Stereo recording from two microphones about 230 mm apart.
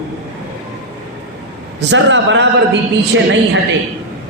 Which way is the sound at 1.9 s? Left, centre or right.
Right.